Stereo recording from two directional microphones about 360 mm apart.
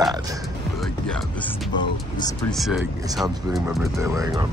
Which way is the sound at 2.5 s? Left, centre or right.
Centre.